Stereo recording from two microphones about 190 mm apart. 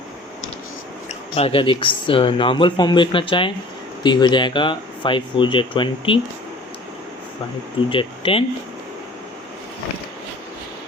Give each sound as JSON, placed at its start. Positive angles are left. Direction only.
{"t": 1.4, "sound": "speech", "side_deg": 30}
{"t": 7.9, "sound": "speech", "side_deg": 30}